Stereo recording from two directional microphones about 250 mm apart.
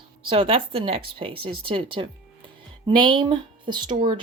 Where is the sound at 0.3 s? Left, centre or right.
Right.